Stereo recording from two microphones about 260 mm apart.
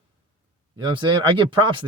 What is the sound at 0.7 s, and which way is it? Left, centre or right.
Speech, centre.